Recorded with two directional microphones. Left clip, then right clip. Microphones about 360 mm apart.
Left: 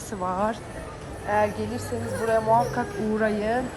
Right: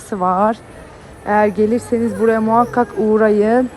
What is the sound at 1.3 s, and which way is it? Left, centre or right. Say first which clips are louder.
Speech: right 10 dB; centre.